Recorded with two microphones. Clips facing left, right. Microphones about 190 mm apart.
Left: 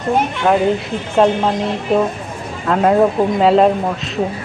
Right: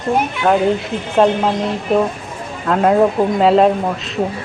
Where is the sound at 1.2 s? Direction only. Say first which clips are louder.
Even; centre (ahead or behind).